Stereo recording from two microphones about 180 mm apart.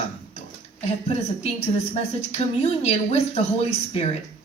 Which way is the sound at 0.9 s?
35° left (ahead or behind).